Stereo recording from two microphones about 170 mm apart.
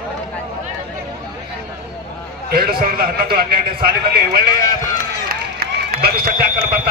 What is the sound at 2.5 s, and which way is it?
A man's voice, 65° right (ahead or behind).